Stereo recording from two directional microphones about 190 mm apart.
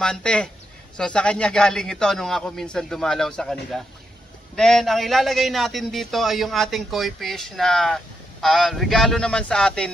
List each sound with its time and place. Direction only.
0.0 s a man's voice: 5° left (ahead or behind)